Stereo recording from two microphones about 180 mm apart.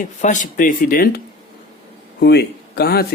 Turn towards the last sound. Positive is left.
turn(degrees=60)  # may be behind; listen again after turning